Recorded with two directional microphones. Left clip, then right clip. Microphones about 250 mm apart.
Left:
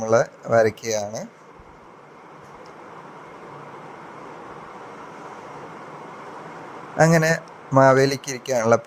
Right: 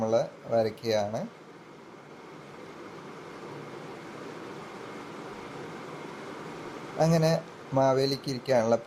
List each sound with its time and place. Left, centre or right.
0.0 s speech: left
7.0 s speech: left